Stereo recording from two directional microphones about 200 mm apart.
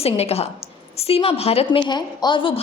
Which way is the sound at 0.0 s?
30° left (ahead or behind).